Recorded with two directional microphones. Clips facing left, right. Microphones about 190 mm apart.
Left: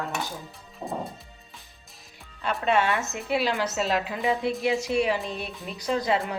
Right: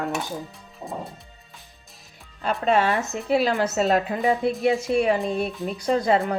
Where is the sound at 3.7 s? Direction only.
50° right (ahead or behind).